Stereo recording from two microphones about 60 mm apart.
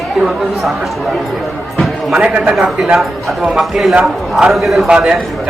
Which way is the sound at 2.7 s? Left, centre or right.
Centre.